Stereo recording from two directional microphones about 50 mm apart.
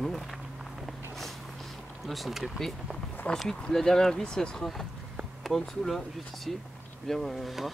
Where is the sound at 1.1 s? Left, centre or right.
Centre.